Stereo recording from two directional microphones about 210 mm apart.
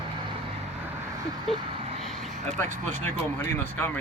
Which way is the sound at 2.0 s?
Centre (ahead or behind).